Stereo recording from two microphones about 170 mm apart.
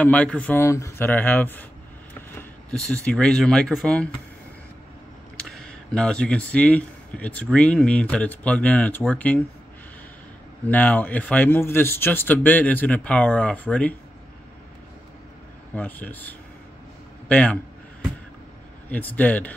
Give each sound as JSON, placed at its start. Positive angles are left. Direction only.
{"t": 0.0, "sound": "speech", "side_deg": 10}
{"t": 5.5, "sound": "speech", "side_deg": 5}
{"t": 10.7, "sound": "speech", "side_deg": 10}
{"t": 15.7, "sound": "a man's voice", "side_deg": 10}
{"t": 18.9, "sound": "speech", "side_deg": 10}